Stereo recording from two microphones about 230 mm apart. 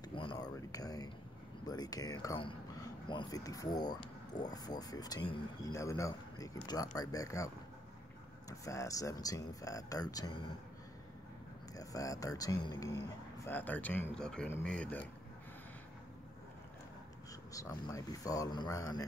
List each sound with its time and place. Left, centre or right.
0.1 s speech: left
11.7 s speech: centre
17.5 s speech: centre